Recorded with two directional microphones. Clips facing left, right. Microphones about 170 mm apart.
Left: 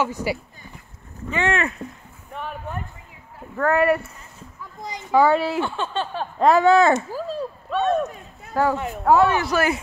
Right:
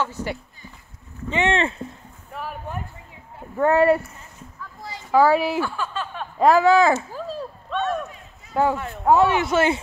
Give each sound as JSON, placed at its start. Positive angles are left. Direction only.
{"t": 0.0, "sound": "speech", "side_deg": 10}
{"t": 1.3, "sound": "speech", "side_deg": -25}
{"t": 2.3, "sound": "a sound", "side_deg": -5}
{"t": 3.3, "sound": "speech", "side_deg": -25}
{"t": 4.6, "sound": "a sound", "side_deg": 15}
{"t": 5.1, "sound": "speech", "side_deg": -5}
{"t": 5.6, "sound": "speech", "side_deg": 25}
{"t": 6.3, "sound": "speech", "side_deg": -5}
{"t": 7.7, "sound": "speech", "side_deg": 20}
{"t": 8.0, "sound": "a sound", "side_deg": 45}
{"t": 8.7, "sound": "speech", "side_deg": 15}
{"t": 9.0, "sound": "speech", "side_deg": -20}